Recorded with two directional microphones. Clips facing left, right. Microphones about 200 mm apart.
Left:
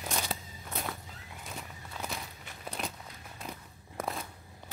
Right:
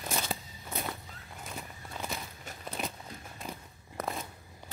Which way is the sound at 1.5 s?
Centre (ahead or behind).